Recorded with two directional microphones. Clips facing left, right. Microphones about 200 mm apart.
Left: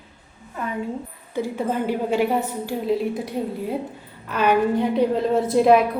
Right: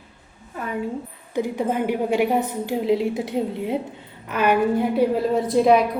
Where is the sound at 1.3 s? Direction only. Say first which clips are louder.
Right 1 dB; 15° right (ahead or behind).